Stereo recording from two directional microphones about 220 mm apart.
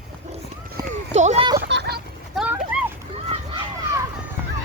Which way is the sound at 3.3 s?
25° right (ahead or behind).